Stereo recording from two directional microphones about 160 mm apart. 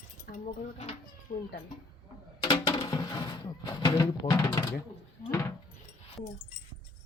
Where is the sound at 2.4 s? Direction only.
25° left (ahead or behind).